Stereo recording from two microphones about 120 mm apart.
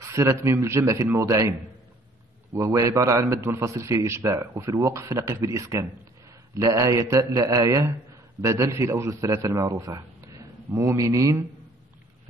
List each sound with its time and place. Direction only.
0.0 s a man's voice: 25° right (ahead or behind)
2.5 s a man's voice: 25° right (ahead or behind)